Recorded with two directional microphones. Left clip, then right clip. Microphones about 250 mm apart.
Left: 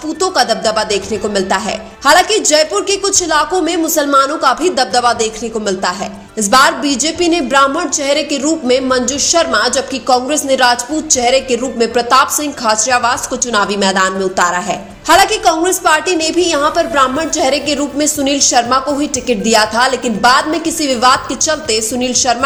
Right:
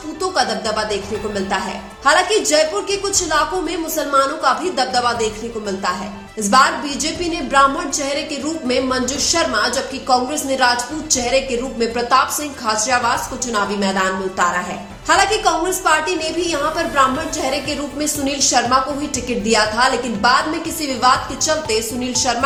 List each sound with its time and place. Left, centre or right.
0.2 s a woman's voice: left